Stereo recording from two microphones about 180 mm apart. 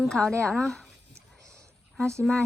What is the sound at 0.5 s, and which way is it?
Speech, centre (ahead or behind).